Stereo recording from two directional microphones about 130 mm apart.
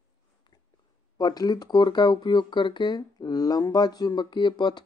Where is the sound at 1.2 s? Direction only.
30° left (ahead or behind).